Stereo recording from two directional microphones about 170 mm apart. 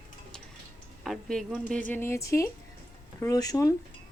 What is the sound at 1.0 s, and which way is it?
Speech, centre (ahead or behind).